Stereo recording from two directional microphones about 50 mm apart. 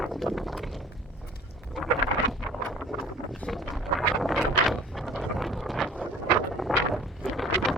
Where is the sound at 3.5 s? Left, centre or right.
Centre.